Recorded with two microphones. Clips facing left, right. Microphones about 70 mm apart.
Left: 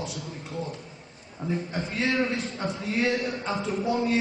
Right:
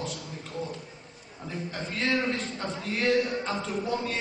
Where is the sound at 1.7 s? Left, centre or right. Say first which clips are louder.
Right 2 dB; centre.